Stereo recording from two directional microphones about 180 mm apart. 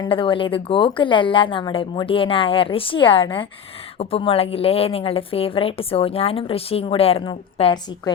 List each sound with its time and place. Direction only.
0.0 s a woman's voice: 30° left (ahead or behind)